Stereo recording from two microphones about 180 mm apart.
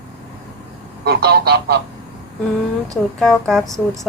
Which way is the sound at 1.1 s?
65° right (ahead or behind).